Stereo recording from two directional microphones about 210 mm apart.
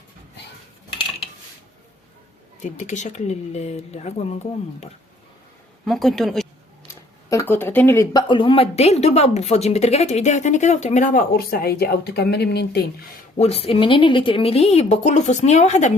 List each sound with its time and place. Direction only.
0.9 s cutlery: 25° left (ahead or behind)
2.6 s speech: 35° left (ahead or behind)
5.8 s speech: centre (ahead or behind)
7.3 s speech: 10° left (ahead or behind); by 13.1 s 50° left (ahead or behind)
13.4 s speech: 30° left (ahead or behind)